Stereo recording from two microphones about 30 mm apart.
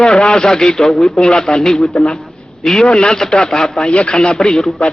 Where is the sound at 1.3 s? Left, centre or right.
Left.